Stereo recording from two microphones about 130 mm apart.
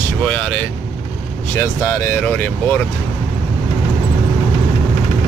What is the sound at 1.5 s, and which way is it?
Speech, 25° left (ahead or behind).